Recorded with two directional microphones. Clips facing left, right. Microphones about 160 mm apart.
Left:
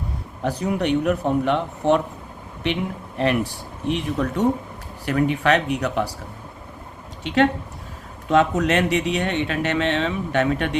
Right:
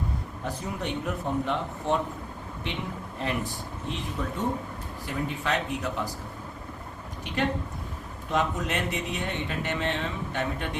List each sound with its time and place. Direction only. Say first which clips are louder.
0.4 s speech: left 11 dB; 70° left (ahead or behind)
3.2 s speech: left 10 dB; 75° left (ahead or behind)
8.3 s speech: left 9 dB; 75° left (ahead or behind)